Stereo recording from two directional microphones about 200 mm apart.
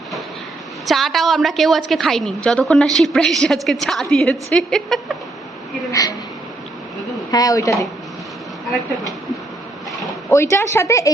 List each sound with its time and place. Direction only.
0.9 s a woman's voice: centre (ahead or behind)
5.9 s a woman's voice: 15° left (ahead or behind)
7.3 s a woman's voice: 15° left (ahead or behind)
10.3 s a woman's voice: 15° left (ahead or behind)